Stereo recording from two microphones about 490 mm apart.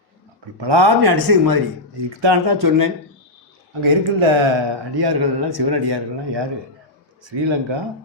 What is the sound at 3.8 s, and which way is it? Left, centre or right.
Speech, right.